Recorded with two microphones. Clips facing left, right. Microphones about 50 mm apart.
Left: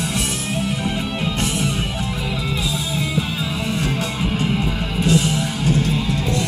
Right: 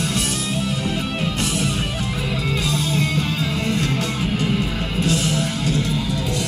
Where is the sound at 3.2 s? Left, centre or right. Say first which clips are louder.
Right 1 dB; left.